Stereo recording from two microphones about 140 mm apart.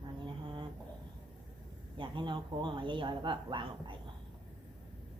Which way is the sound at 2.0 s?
35° right (ahead or behind).